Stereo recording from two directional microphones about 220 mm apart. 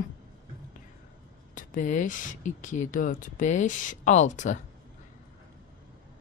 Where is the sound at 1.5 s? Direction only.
35° left (ahead or behind).